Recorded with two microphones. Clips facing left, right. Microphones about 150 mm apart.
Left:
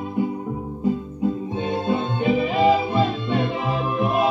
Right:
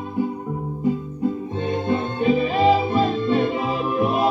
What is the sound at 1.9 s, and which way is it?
Music, 5° left (ahead or behind).